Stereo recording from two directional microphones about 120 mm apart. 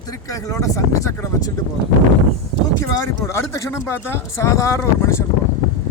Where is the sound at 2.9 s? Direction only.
25° left (ahead or behind).